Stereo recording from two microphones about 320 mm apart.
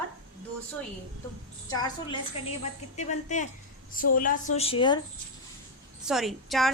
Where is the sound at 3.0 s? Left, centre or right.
Left.